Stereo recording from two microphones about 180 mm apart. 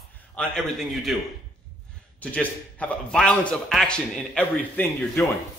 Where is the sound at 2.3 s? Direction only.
5° left (ahead or behind).